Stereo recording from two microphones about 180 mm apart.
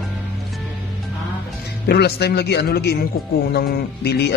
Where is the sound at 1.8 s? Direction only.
65° left (ahead or behind).